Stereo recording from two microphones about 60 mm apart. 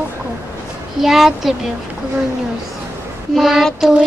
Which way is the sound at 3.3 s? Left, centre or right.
Centre.